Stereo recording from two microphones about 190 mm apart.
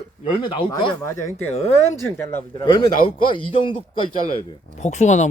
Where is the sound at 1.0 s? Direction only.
15° left (ahead or behind).